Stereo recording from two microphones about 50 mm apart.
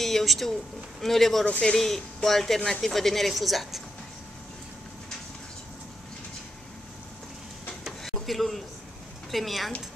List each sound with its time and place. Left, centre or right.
0.0 s speech: centre
1.4 s speech: left
1.8 s speech: centre
8.0 s a sound: centre
9.3 s speech: centre